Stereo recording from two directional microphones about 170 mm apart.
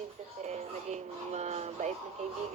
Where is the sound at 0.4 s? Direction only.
40° right (ahead or behind).